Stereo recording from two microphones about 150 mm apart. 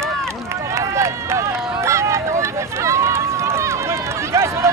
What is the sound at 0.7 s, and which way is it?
Run, 20° right (ahead or behind).